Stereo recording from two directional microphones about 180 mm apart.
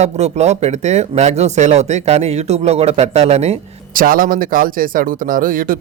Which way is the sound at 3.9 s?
50° right (ahead or behind).